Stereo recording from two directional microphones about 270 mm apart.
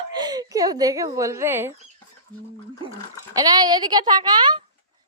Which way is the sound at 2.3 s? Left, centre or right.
Centre.